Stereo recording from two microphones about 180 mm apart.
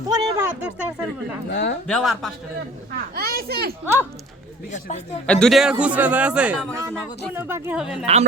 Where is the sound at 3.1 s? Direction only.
55° right (ahead or behind).